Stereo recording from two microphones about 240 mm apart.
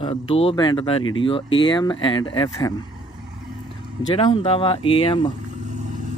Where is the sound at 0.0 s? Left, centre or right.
Left.